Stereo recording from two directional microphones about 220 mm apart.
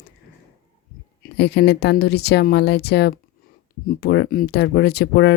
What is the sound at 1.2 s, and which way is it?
Speech, 50° left (ahead or behind).